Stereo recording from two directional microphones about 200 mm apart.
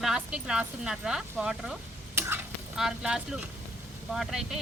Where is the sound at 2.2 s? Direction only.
10° right (ahead or behind).